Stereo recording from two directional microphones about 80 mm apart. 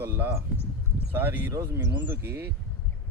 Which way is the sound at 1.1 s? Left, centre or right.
Right.